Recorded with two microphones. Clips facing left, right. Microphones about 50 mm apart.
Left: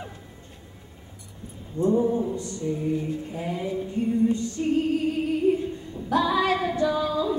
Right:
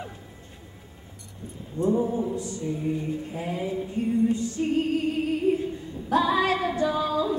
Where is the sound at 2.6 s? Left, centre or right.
Centre.